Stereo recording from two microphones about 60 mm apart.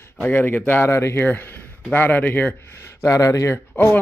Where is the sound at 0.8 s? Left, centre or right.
Left.